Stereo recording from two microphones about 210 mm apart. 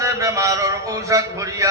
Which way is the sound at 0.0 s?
15° right (ahead or behind).